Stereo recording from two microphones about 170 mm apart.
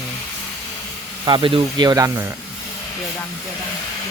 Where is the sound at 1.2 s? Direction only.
30° right (ahead or behind).